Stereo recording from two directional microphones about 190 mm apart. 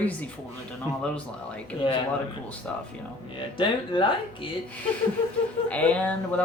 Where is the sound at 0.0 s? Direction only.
10° left (ahead or behind).